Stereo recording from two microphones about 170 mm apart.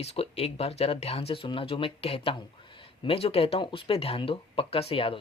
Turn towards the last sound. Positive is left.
turn(degrees=35)  # may be behind; listen again after turning